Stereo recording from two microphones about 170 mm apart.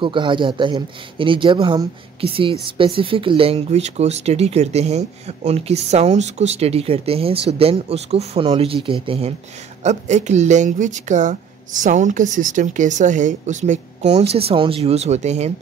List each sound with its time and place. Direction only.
0.0 s speech: 30° right (ahead or behind)
9.8 s speech: 45° right (ahead or behind)